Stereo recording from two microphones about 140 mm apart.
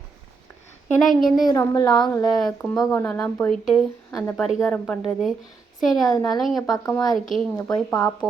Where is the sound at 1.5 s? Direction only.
25° left (ahead or behind).